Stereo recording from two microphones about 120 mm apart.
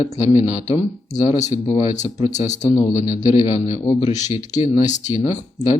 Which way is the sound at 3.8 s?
45° left (ahead or behind).